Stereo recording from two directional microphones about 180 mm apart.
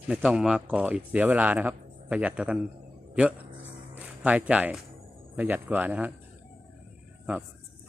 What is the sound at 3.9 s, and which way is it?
Speech, 10° right (ahead or behind).